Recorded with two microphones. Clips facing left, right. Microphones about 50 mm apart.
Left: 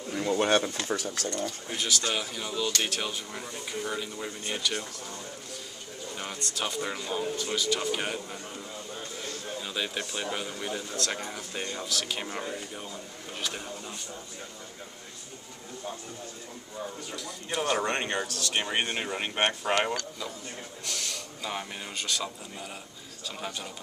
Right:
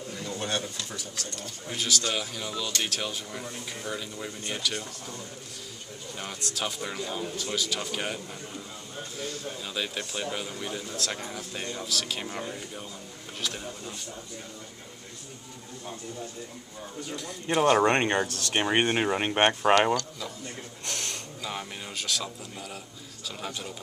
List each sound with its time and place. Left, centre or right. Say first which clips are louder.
0.1 s speech: left 8 dB; left
1.7 s speech: right 2 dB; centre
6.1 s speech: even; centre
9.6 s speech: left 2 dB; centre
17.1 s speech: right 10 dB; right
20.8 s a sound: right 1 dB; right
21.4 s speech: left 1 dB; centre